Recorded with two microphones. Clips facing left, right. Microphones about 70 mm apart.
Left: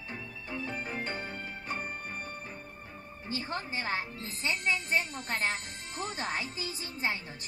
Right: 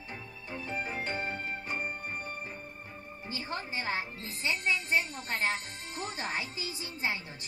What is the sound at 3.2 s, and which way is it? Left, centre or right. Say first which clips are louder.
A woman's voice: left 2 dB; left.